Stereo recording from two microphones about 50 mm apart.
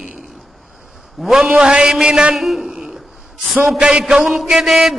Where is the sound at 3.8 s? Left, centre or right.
Centre.